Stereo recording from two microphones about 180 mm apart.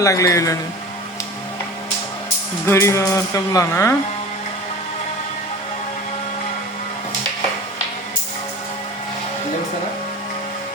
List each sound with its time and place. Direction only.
0.0 s speech: 15° left (ahead or behind)
2.6 s speech: 15° left (ahead or behind)